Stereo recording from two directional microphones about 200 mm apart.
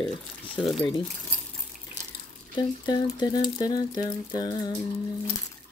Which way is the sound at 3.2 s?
20° left (ahead or behind).